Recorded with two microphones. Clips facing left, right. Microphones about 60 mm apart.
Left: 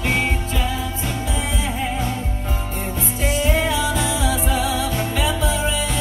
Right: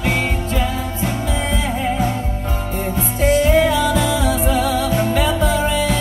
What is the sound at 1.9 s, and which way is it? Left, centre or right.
Music, centre.